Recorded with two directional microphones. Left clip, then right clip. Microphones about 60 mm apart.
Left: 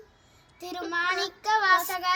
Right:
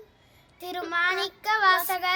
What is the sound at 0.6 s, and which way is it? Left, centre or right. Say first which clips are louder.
Child singing: right 3 dB; right.